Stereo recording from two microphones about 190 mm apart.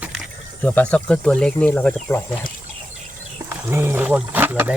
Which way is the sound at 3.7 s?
10° right (ahead or behind).